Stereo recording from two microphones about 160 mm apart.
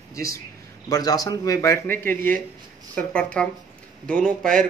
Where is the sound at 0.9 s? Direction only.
25° left (ahead or behind); by 4.5 s 5° left (ahead or behind).